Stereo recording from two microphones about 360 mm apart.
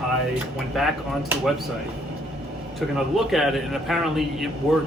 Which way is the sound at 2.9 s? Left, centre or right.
Centre.